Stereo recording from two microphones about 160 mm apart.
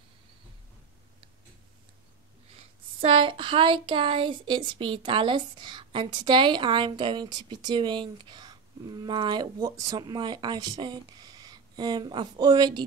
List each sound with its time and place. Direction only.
2.5 s speech: 35° right (ahead or behind)